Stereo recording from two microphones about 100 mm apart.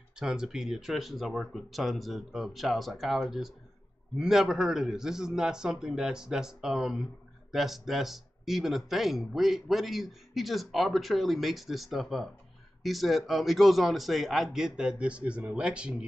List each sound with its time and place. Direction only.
0.1 s speech: 5° right (ahead or behind)